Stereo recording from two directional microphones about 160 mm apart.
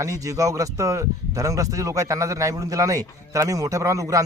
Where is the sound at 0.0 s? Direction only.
20° right (ahead or behind).